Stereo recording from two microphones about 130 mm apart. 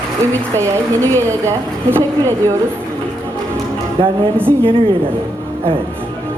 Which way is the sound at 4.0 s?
40° right (ahead or behind).